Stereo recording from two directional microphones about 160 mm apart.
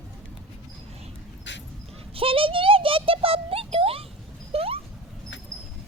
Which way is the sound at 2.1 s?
35° right (ahead or behind).